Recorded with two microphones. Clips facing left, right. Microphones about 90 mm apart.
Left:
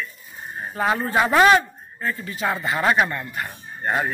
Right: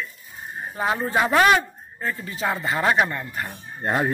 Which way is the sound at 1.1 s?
5° left (ahead or behind).